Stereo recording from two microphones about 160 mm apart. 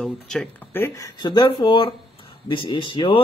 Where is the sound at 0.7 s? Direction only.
15° left (ahead or behind); by 3.2 s 30° left (ahead or behind).